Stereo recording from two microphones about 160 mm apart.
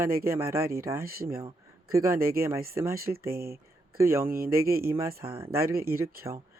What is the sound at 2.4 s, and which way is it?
Speech, 15° right (ahead or behind).